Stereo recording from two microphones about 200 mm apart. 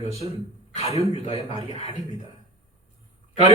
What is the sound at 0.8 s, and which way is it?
A man's voice, 30° left (ahead or behind).